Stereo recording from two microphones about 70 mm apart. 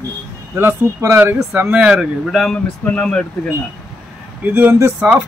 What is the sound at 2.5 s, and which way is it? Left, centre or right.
Speech, centre.